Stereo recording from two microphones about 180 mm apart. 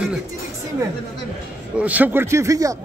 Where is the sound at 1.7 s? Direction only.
10° right (ahead or behind).